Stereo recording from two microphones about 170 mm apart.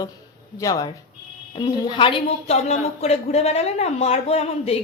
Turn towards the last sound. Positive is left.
turn(degrees=35)  # may be behind; listen again after turning